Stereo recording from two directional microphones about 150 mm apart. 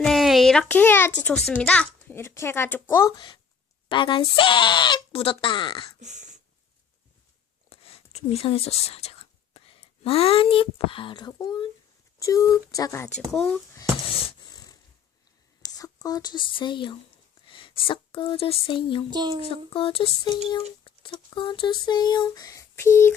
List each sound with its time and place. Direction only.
0.0 s a sound: centre (ahead or behind)
0.7 s a child's voice: 15° left (ahead or behind)
3.2 s speech: 30° left (ahead or behind)
6.0 s burping: 55° right (ahead or behind)
7.7 s speech: 40° left (ahead or behind); by 13.1 s 20° left (ahead or behind)
14.3 s a sound: 30° left (ahead or behind)
15.6 s speech: 25° left (ahead or behind)
19.1 s speech: 30° right (ahead or behind)
19.5 s speech: 40° left (ahead or behind); by 23.1 s 15° left (ahead or behind)